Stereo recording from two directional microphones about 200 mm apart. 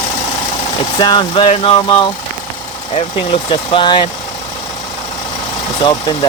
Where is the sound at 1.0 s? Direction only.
25° left (ahead or behind).